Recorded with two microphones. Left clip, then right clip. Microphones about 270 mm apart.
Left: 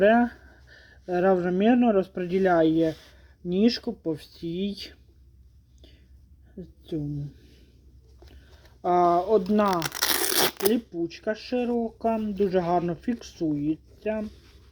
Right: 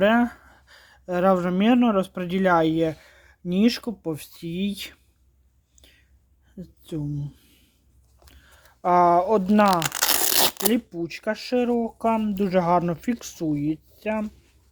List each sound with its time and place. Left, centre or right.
0.0 s speech: right
6.6 s a woman's voice: right
8.8 s speech: right
9.8 s tearing: centre
10.7 s speech: right